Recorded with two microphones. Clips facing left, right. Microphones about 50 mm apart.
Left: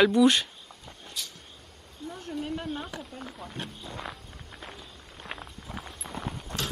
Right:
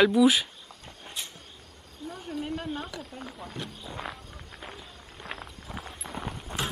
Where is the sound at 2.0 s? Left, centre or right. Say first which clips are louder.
Even; centre.